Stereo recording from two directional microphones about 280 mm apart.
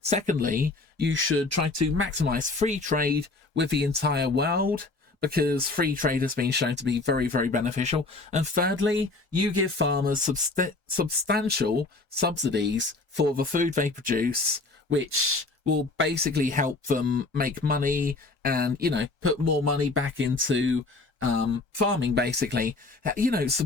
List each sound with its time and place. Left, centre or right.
0.0 s speech: right
2.0 s speech: right
9.3 s speech: right
14.8 s speech: right
16.0 s speech: right
19.5 s speech: right
21.8 s speech: right